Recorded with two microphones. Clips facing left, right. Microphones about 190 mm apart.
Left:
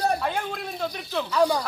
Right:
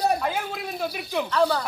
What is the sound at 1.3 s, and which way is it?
Speech, 10° left (ahead or behind).